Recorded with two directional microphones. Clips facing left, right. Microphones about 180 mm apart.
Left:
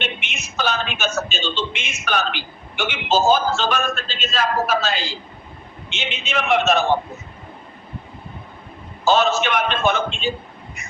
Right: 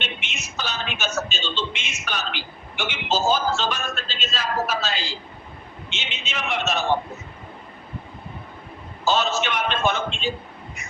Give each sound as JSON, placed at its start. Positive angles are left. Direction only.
{"t": 0.0, "sound": "a sound", "side_deg": 55}
{"t": 2.7, "sound": "a man's voice", "side_deg": 55}
{"t": 9.0, "sound": "a man's voice", "side_deg": 55}